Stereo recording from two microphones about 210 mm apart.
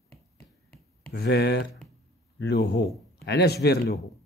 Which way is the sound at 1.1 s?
50° left (ahead or behind).